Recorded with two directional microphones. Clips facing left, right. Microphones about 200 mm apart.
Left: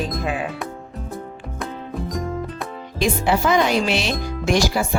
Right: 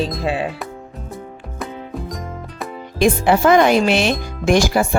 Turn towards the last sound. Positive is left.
turn(degrees=-50)  # may be behind; listen again after turning